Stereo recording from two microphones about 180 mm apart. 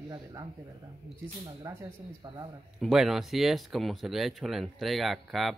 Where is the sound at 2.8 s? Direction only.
Centre (ahead or behind).